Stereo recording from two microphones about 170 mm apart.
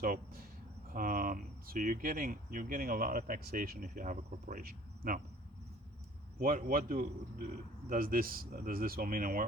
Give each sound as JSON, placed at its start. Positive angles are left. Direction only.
{"t": 0.9, "sound": "speech", "side_deg": -55}
{"t": 6.4, "sound": "speech", "side_deg": -50}